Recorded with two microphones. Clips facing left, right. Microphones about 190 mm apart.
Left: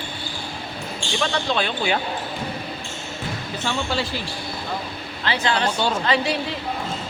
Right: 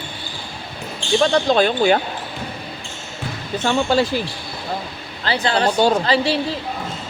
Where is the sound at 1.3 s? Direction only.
40° right (ahead or behind).